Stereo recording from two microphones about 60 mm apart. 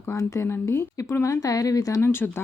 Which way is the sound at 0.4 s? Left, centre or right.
Left.